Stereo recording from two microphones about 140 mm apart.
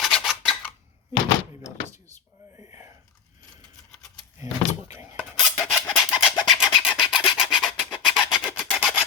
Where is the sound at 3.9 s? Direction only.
5° left (ahead or behind).